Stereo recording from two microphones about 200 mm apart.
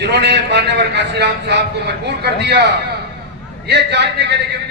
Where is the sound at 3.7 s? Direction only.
60° right (ahead or behind).